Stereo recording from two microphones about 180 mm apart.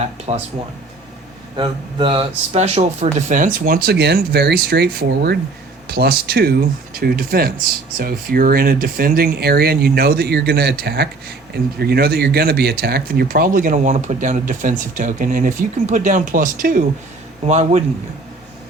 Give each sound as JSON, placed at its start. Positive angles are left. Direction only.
{"t": 0.0, "sound": "a man's voice", "side_deg": -35}
{"t": 1.5, "sound": "speech", "side_deg": -30}
{"t": 17.4, "sound": "a man's voice", "side_deg": -40}